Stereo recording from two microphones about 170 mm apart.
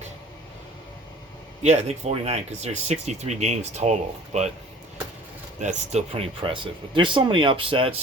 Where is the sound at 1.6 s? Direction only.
40° right (ahead or behind).